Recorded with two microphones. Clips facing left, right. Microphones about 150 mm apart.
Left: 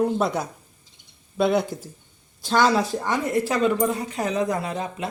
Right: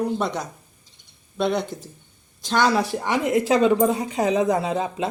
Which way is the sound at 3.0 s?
20° right (ahead or behind).